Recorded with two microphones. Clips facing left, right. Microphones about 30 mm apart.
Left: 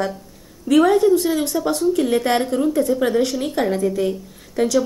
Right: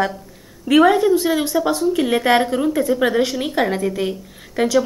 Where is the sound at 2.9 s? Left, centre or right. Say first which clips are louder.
Right 1 dB; right.